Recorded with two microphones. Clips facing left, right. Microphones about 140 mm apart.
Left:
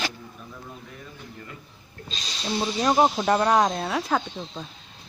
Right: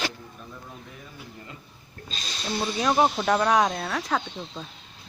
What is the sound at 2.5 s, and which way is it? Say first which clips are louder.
Speech: left 2 dB; 20° left (ahead or behind).